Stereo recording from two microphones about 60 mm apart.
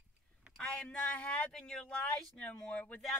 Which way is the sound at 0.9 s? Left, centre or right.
Centre.